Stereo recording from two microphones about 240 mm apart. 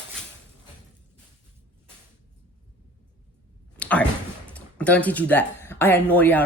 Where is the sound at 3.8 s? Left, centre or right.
Centre.